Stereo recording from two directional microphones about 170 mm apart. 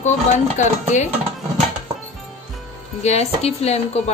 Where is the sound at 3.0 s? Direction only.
40° left (ahead or behind).